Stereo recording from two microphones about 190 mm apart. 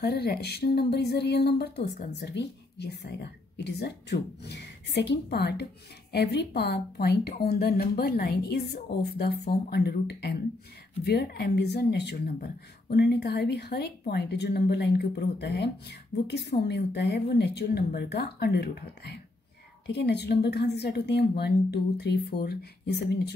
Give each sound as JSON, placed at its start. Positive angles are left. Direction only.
{"t": 0.0, "sound": "a woman's voice", "side_deg": 55}